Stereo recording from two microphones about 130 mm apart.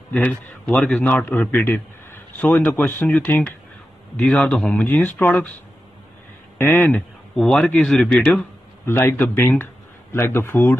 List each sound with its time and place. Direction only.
0.1 s speech: 15° left (ahead or behind)
0.7 s a man's voice: 5° left (ahead or behind)
6.6 s a man's voice: 15° left (ahead or behind)
7.3 s a man's voice: 5° left (ahead or behind)